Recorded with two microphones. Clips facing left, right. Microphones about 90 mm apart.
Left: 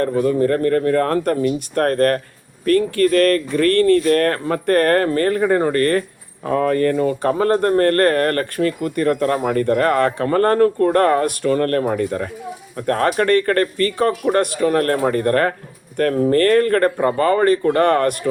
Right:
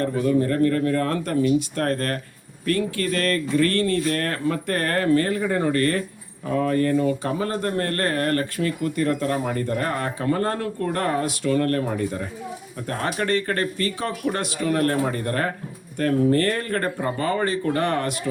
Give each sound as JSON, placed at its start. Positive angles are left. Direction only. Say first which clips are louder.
{"t": 0.0, "sound": "speech", "louder": "left 4 dB", "side_deg": 45}